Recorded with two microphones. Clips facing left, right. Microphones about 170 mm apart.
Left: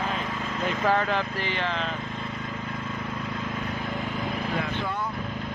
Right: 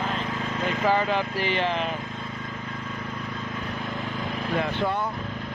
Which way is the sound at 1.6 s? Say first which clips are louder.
Right 4 dB; 15° right (ahead or behind).